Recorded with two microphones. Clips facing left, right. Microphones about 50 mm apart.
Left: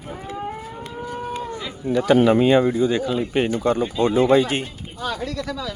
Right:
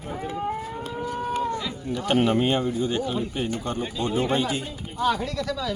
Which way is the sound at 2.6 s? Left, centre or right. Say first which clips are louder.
Left 7 dB; left.